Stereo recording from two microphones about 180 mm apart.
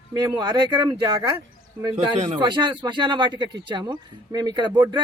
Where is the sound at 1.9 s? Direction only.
40° right (ahead or behind).